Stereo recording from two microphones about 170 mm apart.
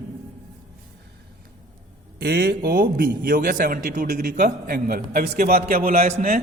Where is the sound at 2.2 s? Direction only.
70° right (ahead or behind).